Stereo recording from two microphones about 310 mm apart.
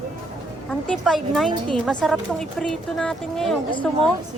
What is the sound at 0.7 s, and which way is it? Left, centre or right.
A woman's voice, centre.